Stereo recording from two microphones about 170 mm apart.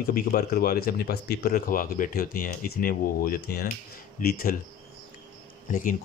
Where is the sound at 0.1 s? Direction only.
60° left (ahead or behind).